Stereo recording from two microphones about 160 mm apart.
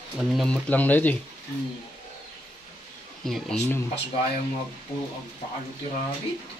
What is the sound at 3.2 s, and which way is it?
Speech, centre (ahead or behind).